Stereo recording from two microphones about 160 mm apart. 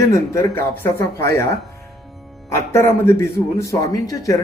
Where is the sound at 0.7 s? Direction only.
15° left (ahead or behind).